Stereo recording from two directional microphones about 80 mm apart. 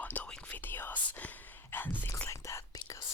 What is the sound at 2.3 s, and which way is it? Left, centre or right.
Whispering, left.